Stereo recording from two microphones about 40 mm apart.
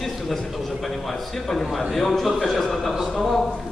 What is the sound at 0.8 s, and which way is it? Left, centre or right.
A man's voice, centre.